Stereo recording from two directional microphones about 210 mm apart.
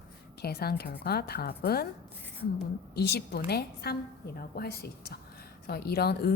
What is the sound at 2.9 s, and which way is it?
A woman's voice, 50° left (ahead or behind).